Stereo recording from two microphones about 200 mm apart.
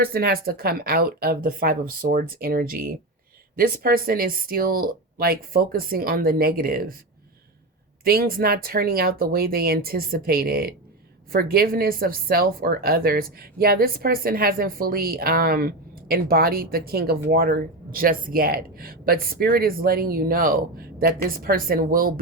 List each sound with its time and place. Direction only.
0.0 s speech: 50° right (ahead or behind)
8.0 s speech: 50° right (ahead or behind)